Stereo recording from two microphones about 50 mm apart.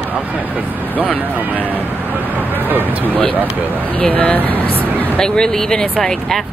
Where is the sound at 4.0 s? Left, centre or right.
Left.